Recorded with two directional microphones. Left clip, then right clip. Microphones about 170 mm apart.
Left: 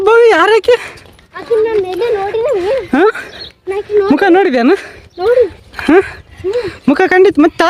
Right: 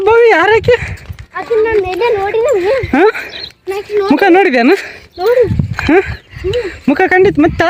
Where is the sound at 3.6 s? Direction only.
70° right (ahead or behind).